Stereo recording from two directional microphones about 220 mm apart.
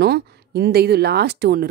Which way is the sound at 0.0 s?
45° right (ahead or behind).